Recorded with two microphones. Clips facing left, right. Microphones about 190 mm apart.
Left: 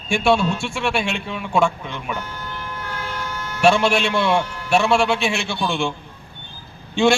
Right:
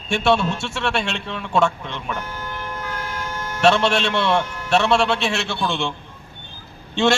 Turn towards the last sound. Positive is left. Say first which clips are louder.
# left 2 dB
turn(degrees=5)  # may be behind; listen again after turning